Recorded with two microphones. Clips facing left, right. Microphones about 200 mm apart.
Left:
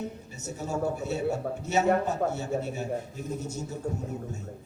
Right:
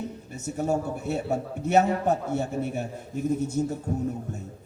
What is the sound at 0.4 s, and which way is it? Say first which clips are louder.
A man's voice: right 3 dB; 55° right (ahead or behind).